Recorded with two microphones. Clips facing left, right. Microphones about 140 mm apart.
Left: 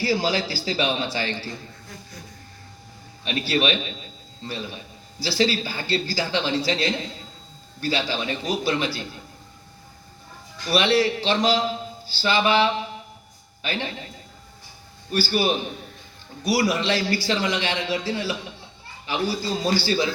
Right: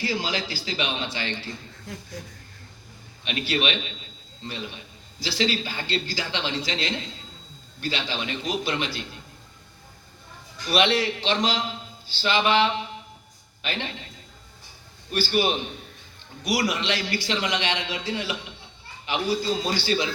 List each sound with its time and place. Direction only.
0.0 s a man's voice: 35° left (ahead or behind)
3.2 s a man's voice: 35° left (ahead or behind)
10.7 s a man's voice: 35° left (ahead or behind)
15.1 s a man's voice: 35° left (ahead or behind)